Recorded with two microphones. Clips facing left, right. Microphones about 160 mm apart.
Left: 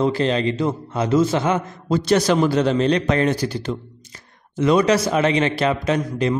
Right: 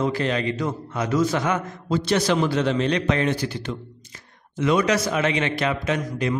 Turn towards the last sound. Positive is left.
turn(degrees=35)  # may be behind; listen again after turning